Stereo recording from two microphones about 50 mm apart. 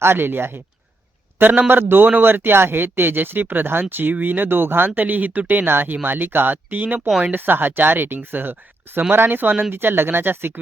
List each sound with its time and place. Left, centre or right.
0.0 s a man's voice: right
4.9 s speech: right
9.7 s speech: right